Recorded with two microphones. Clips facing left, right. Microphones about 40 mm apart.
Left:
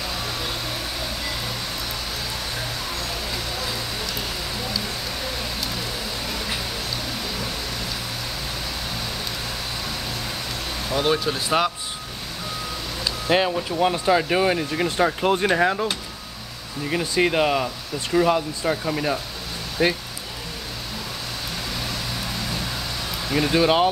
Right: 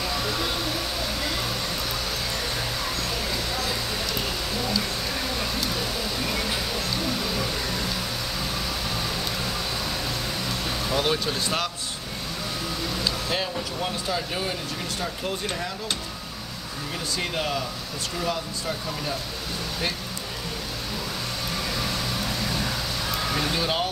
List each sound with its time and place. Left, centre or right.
10.9 s speech: centre
13.3 s speech: left
14.1 s speech: left
17.1 s speech: left
23.5 s speech: left